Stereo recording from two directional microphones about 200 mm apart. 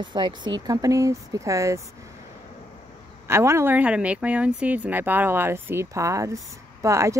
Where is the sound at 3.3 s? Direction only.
15° right (ahead or behind).